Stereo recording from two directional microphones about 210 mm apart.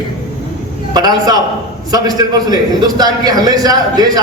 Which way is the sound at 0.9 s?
20° right (ahead or behind).